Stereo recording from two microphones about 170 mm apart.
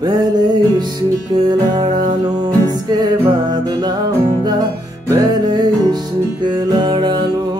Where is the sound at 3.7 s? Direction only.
20° right (ahead or behind).